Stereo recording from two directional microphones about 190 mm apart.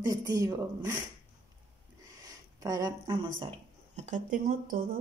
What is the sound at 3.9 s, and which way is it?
Speech, 40° right (ahead or behind).